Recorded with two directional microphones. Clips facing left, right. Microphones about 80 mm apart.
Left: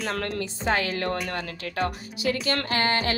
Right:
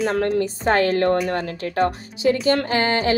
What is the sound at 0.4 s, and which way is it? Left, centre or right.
Speech, right.